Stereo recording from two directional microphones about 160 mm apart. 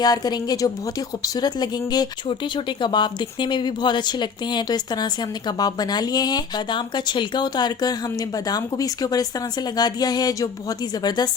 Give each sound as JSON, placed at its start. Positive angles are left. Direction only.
{"t": 0.0, "sound": "a woman's voice", "side_deg": 25}